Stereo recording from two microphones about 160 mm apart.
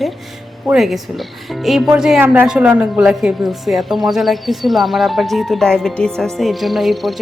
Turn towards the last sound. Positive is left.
turn(degrees=0)  # may be behind; listen again after turning